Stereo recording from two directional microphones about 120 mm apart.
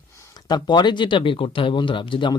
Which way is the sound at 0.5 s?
35° left (ahead or behind).